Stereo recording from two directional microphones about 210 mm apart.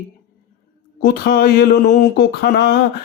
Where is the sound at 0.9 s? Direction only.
45° left (ahead or behind).